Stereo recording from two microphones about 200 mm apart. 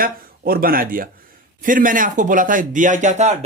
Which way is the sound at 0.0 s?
45° right (ahead or behind).